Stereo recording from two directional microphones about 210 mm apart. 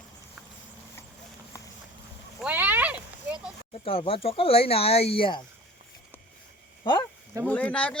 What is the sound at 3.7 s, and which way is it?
Speech, 25° left (ahead or behind).